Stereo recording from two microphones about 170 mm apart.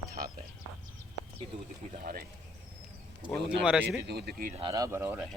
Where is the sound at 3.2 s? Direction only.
30° right (ahead or behind).